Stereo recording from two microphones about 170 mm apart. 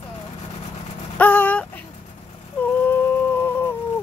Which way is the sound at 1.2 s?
10° left (ahead or behind).